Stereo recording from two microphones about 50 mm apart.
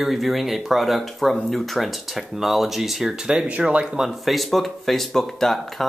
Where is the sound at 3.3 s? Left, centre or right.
Centre.